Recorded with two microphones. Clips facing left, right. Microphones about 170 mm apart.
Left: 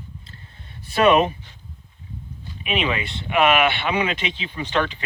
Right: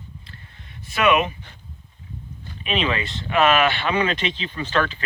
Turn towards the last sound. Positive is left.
turn(degrees=15)  # may be behind; listen again after turning